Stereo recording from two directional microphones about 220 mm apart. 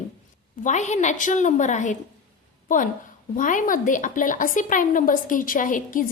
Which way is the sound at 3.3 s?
35° left (ahead or behind).